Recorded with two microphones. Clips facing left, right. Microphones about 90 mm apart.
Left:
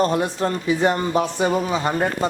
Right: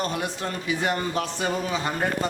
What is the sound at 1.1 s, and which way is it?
Speech, 20° left (ahead or behind).